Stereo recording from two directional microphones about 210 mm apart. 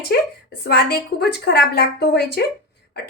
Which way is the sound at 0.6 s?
50° left (ahead or behind).